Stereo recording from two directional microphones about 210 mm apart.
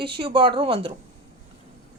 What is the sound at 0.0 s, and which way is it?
Speech, 25° right (ahead or behind).